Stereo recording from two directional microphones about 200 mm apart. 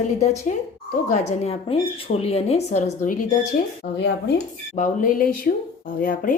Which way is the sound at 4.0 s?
60° left (ahead or behind).